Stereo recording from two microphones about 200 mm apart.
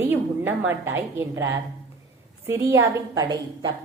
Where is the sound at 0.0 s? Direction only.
10° right (ahead or behind).